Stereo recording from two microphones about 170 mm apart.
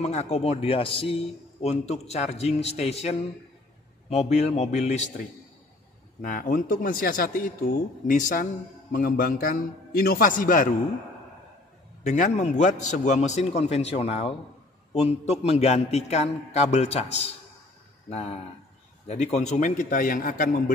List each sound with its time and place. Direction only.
0.0 s a man's voice: 40° left (ahead or behind)
6.2 s a man's voice: 50° left (ahead or behind)
12.1 s a man's voice: 45° left (ahead or behind)